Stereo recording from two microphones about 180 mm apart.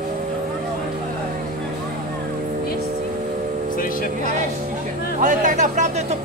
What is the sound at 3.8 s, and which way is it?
Speech, 50° left (ahead or behind).